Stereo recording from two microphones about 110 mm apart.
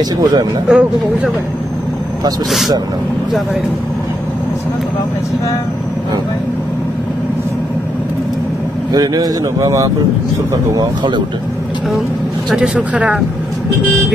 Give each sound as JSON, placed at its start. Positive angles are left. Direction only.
{"t": 0.2, "sound": "speech", "side_deg": -35}
{"t": 0.7, "sound": "speech", "side_deg": -5}
{"t": 8.9, "sound": "speech", "side_deg": -35}
{"t": 12.4, "sound": "speech", "side_deg": -5}